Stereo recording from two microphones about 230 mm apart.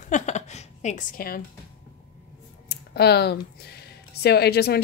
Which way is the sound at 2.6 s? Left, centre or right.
Left.